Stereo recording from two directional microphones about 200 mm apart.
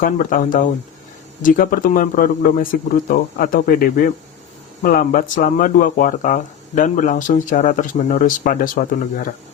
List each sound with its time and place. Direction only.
0.0 s speech: 45° left (ahead or behind)